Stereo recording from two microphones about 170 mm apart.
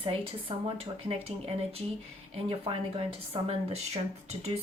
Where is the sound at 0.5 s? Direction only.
30° right (ahead or behind).